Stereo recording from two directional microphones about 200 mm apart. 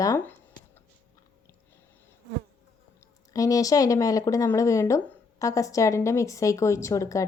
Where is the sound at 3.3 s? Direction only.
15° left (ahead or behind).